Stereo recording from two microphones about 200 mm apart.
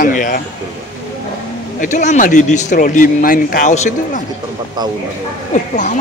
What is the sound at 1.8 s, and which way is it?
Speech, 40° left (ahead or behind).